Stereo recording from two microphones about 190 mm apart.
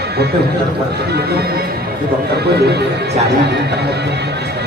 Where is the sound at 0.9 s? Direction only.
60° right (ahead or behind).